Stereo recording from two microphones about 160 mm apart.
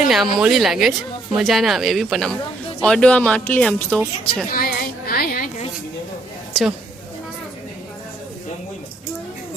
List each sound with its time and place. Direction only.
0.1 s speech: centre (ahead or behind)
4.5 s a sound: 65° left (ahead or behind)
6.5 s a woman's voice: 5° right (ahead or behind)